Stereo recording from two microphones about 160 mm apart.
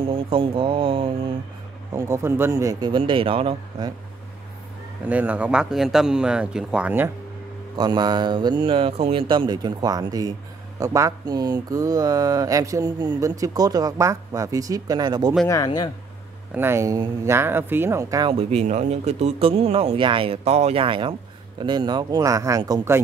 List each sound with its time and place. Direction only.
0.0 s speech: 35° right (ahead or behind)
2.0 s speech: 15° right (ahead or behind); by 3.9 s 35° right (ahead or behind)
5.0 s speech: 10° right (ahead or behind)
7.7 s speech: 25° right (ahead or behind)
15.4 s speech: 20° left (ahead or behind)
16.5 s speech: 15° right (ahead or behind)
18.3 s speech: 40° right (ahead or behind); by 23.0 s 15° right (ahead or behind)